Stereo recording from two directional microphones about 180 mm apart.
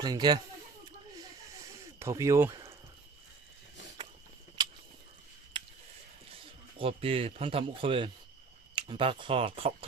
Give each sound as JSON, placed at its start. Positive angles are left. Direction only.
{"t": 0.0, "sound": "speech", "side_deg": -20}
{"t": 2.0, "sound": "speech", "side_deg": -15}
{"t": 4.6, "sound": "a sound", "side_deg": -25}
{"t": 6.3, "sound": "speech", "side_deg": -30}